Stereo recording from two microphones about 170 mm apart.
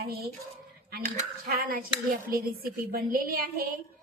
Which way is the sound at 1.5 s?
60° right (ahead or behind).